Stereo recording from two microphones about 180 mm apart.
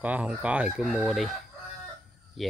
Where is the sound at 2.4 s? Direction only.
Centre (ahead or behind).